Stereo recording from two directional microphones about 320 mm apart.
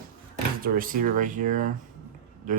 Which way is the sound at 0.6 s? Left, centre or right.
Right.